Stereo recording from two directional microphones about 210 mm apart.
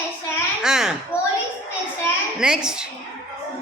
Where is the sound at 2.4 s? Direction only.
5° right (ahead or behind).